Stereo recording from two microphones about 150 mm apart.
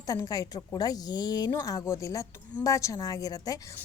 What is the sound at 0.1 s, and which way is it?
A woman's voice, 25° left (ahead or behind).